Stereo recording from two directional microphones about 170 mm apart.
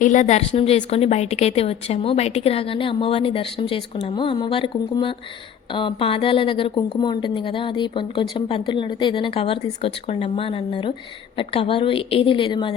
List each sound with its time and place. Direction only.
0.0 s a woman's voice: 45° left (ahead or behind); by 12.7 s 30° left (ahead or behind)